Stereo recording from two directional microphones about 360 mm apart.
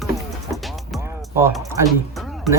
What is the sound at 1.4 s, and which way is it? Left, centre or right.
Speech, centre.